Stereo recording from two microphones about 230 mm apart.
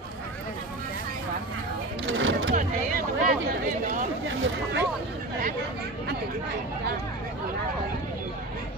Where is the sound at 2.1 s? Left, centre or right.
Right.